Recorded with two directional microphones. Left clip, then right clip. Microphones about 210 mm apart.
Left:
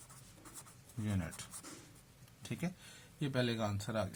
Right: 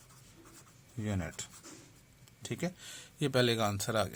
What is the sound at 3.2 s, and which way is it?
Speech, 50° right (ahead or behind).